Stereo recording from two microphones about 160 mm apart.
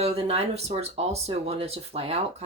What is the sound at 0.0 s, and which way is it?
Speech, 40° right (ahead or behind).